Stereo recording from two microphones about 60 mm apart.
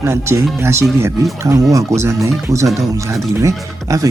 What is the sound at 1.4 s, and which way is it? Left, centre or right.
Speech, right.